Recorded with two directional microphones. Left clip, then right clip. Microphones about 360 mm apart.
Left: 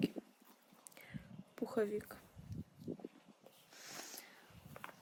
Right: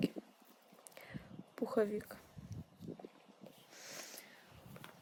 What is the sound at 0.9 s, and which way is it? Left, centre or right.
Whispering, centre.